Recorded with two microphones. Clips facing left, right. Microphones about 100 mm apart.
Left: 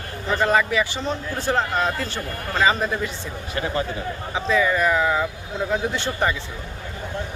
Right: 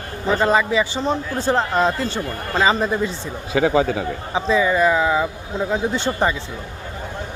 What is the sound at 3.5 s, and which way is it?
Speech, 90° right.